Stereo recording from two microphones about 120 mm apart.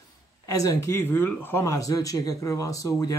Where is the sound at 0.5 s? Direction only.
30° left (ahead or behind).